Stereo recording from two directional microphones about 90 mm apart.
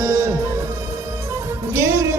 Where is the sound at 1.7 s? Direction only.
30° right (ahead or behind).